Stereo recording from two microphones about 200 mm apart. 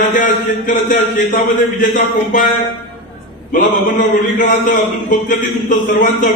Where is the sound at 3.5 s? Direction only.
40° left (ahead or behind).